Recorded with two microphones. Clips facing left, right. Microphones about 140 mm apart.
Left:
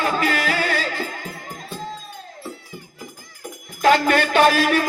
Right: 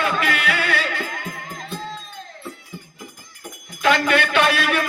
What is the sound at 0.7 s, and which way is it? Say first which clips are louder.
Music: even; 65° right (ahead or behind).